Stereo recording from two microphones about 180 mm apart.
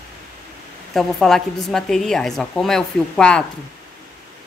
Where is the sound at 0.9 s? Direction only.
Centre (ahead or behind).